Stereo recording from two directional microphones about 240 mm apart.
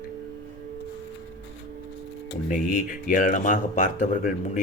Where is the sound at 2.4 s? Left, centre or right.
Left.